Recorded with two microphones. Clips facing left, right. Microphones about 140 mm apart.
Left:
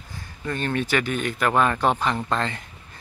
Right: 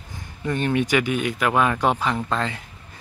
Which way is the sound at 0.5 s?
15° right (ahead or behind).